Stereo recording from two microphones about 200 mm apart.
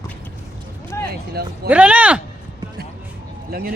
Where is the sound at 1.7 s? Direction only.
5° right (ahead or behind).